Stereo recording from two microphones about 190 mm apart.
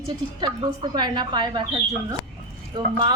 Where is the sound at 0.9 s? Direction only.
25° right (ahead or behind).